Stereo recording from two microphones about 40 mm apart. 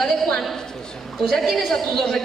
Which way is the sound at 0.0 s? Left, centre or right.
Centre.